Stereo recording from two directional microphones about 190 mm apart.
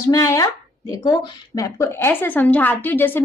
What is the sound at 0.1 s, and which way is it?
A woman's voice, 15° left (ahead or behind).